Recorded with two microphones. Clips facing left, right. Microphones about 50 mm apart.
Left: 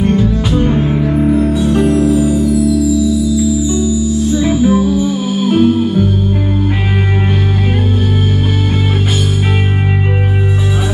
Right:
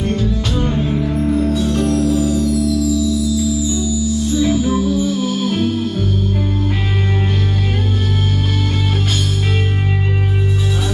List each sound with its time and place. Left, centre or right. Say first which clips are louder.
0.0 s music: left 6 dB; centre